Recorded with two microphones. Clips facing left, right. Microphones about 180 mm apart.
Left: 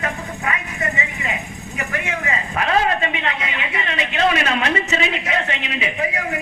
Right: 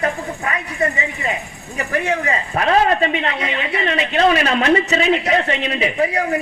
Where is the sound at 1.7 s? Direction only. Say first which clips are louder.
Right 6 dB; 35° right (ahead or behind).